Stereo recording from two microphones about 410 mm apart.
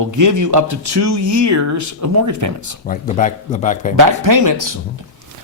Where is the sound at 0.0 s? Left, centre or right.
Right.